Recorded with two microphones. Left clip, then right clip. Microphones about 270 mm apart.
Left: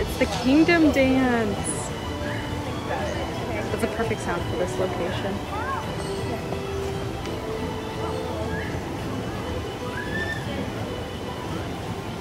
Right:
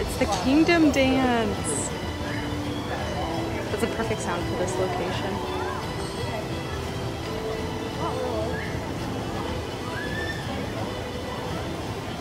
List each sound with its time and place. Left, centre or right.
0.2 s speech: centre